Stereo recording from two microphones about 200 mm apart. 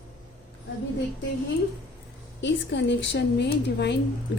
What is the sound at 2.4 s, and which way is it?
A woman's voice, 60° left (ahead or behind).